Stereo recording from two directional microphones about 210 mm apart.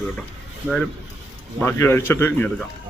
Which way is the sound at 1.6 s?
10° left (ahead or behind).